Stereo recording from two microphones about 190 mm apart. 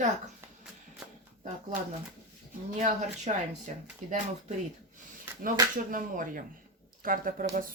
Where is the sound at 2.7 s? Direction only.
40° right (ahead or behind).